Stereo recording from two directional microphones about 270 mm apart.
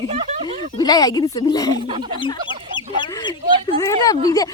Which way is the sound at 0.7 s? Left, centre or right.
Centre.